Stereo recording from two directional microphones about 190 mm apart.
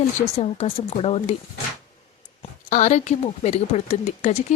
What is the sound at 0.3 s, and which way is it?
Speech, 30° left (ahead or behind).